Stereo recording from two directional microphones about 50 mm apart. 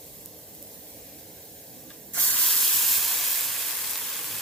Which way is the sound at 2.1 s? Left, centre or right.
Left.